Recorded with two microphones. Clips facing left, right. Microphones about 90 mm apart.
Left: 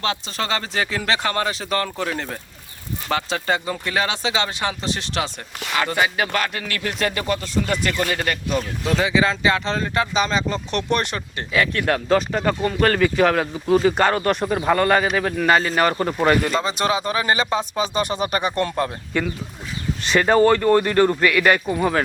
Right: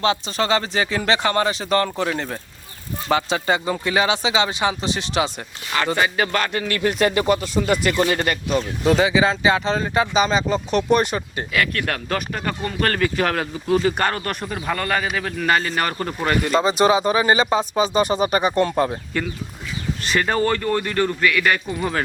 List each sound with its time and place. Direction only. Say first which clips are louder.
0.0 s speech: right 4 dB; 5° right (ahead or behind)
7.0 s speech: right 4 dB; 15° right (ahead or behind)
11.5 s speech: left 3 dB; 20° left (ahead or behind)
16.5 s speech: right 5 dB; 5° right (ahead or behind)
20.1 s speech: left 5 dB; 15° left (ahead or behind)